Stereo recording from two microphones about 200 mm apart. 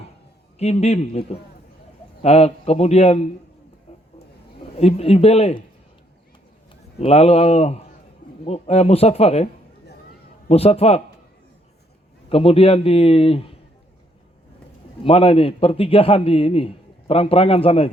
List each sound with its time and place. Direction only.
0.6 s speech: 30° left (ahead or behind)
4.7 s a man's voice: 30° left (ahead or behind)
7.0 s speech: 30° left (ahead or behind)
10.5 s speech: 30° left (ahead or behind)
12.3 s a man's voice: 30° left (ahead or behind)
15.0 s a man's voice: 25° left (ahead or behind)